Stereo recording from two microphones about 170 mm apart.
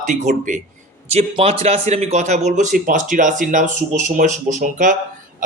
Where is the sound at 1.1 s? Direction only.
35° right (ahead or behind).